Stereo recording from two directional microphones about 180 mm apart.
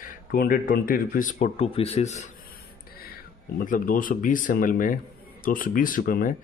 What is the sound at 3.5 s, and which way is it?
Speech, 50° left (ahead or behind).